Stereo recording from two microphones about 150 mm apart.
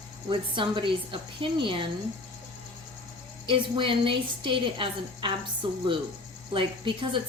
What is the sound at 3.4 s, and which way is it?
A woman's voice, 35° right (ahead or behind).